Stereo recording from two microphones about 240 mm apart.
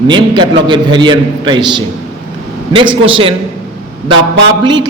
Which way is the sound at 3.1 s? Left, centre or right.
Right.